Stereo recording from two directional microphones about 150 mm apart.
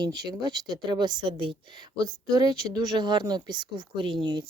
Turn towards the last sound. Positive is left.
turn(degrees=-30)  # may be behind; listen again after turning